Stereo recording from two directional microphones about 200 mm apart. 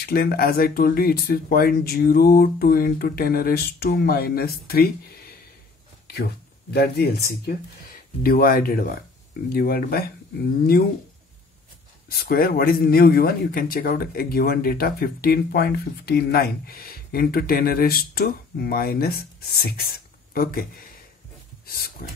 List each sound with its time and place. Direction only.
0.0 s a man's voice: 50° left (ahead or behind)
6.7 s a man's voice: 55° left (ahead or behind)
12.1 s a man's voice: 50° left (ahead or behind)
21.6 s a sound: 50° left (ahead or behind)